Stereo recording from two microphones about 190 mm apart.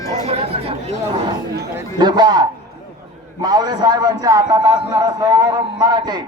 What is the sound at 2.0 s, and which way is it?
A man's voice, 20° right (ahead or behind).